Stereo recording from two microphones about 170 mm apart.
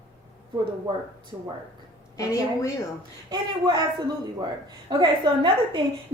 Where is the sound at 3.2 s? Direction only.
25° right (ahead or behind).